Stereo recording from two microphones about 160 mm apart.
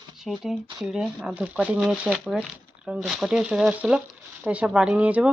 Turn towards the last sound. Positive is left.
turn(degrees=-10)  # may be behind; listen again after turning